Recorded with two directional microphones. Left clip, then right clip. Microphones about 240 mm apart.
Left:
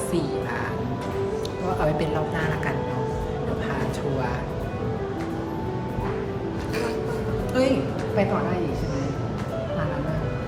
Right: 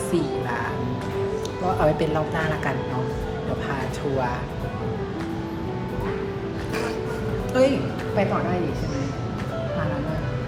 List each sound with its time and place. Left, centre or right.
1.6 s speech: centre
7.5 s a woman's voice: centre